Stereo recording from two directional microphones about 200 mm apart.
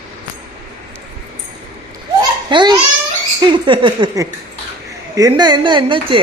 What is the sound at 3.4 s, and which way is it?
A man's voice, 25° right (ahead or behind).